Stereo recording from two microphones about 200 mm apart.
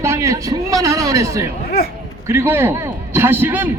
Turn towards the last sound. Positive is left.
turn(degrees=-10)  # may be behind; listen again after turning